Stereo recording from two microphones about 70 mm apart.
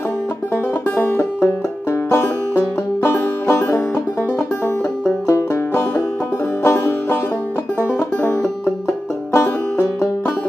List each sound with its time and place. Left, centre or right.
0.9 s music: left
5.2 s music: left
9.3 s music: left